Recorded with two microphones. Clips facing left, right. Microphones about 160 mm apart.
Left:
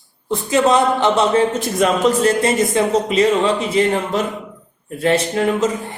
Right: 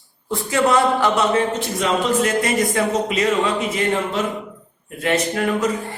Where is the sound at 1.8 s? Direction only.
40° left (ahead or behind).